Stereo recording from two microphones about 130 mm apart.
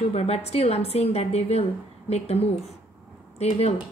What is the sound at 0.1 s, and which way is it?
Speech, 55° left (ahead or behind).